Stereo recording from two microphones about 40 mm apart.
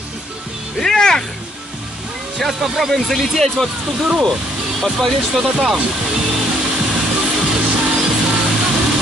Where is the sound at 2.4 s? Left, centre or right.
Centre.